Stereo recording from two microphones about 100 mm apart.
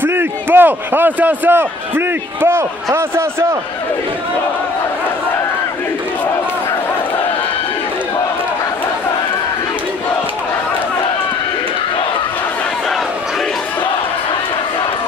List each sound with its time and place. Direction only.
0.0 s a man's voice: 20° right (ahead or behind)